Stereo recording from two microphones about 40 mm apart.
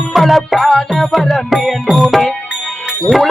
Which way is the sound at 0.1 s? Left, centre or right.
Centre.